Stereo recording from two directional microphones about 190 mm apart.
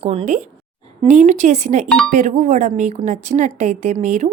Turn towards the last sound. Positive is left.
turn(degrees=-40)  # may be behind; listen again after turning